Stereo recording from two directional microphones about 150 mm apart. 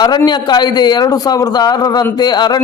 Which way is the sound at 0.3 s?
30° left (ahead or behind).